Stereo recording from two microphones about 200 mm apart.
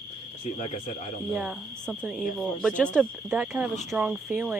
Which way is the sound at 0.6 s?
35° left (ahead or behind).